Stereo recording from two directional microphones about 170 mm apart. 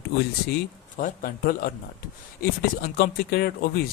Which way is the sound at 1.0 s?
55° left (ahead or behind).